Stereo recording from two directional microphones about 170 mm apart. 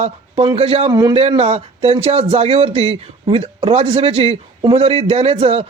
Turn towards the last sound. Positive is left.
turn(degrees=-35)  # may be behind; listen again after turning